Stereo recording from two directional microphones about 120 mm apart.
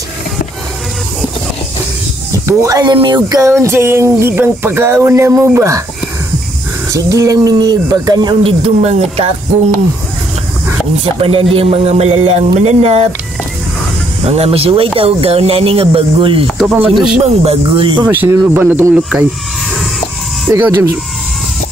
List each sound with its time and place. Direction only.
2.4 s a sound: 30° right (ahead or behind)
6.9 s speech: 30° right (ahead or behind)
8.4 s speech: 55° right (ahead or behind)
11.1 s speech: 50° right (ahead or behind)
14.2 s speech: 60° right (ahead or behind)
16.4 s speech: centre (ahead or behind)
17.2 s speech: 60° right (ahead or behind); by 18.0 s 45° right (ahead or behind)
18.0 s speech: 15° right (ahead or behind)
20.5 s a sound: 20° right (ahead or behind)